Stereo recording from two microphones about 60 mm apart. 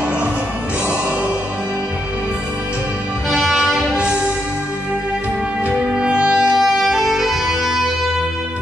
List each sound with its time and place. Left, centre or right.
3.6 s music: centre
5.7 s music: right
6.5 s music: centre